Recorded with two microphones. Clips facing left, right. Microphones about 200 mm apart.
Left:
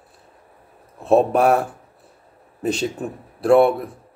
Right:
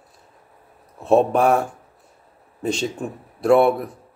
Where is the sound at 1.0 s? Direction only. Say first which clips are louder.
Even; centre (ahead or behind).